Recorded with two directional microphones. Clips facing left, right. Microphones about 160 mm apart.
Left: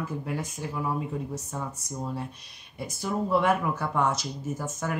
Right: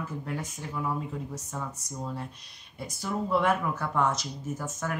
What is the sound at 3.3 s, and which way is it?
Speech, 10° left (ahead or behind).